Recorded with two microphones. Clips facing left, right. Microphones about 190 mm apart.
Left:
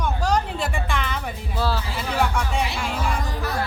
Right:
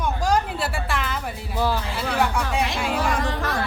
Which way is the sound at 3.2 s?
90° right.